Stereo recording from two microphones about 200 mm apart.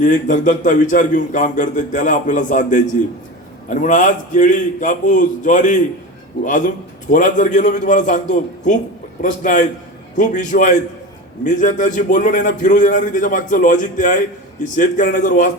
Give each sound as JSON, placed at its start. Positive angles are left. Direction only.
{"t": 0.0, "sound": "a man's voice", "side_deg": 40}
{"t": 7.1, "sound": "a man's voice", "side_deg": 40}